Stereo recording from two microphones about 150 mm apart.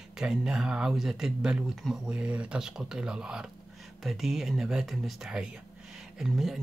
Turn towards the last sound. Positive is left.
turn(degrees=0)  # may be behind; listen again after turning